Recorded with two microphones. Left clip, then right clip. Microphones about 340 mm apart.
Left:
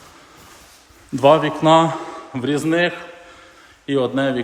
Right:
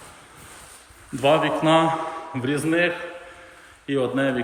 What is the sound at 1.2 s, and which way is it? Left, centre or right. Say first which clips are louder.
A man's voice: left 5 dB; centre.